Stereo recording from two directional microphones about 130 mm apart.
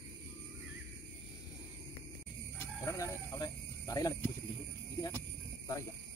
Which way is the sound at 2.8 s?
25° left (ahead or behind).